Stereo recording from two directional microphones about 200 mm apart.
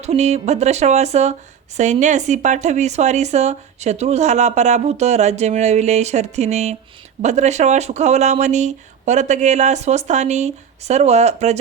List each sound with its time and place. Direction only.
0.0 s speech: 35° right (ahead or behind)